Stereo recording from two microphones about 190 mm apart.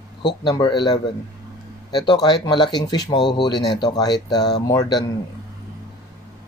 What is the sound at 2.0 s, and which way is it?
Speech, 25° left (ahead or behind).